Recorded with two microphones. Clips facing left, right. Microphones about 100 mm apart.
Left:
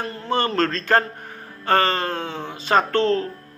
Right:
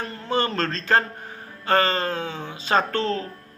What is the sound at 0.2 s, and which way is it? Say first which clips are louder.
A man's voice: left 3 dB; 45° left (ahead or behind).